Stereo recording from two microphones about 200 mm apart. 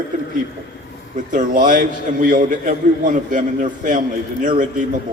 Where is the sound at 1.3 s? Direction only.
40° right (ahead or behind).